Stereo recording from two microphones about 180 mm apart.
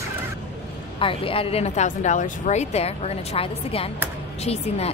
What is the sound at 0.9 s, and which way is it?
A woman's voice, 30° left (ahead or behind).